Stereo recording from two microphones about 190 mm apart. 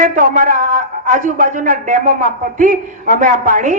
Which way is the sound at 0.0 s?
45° right (ahead or behind).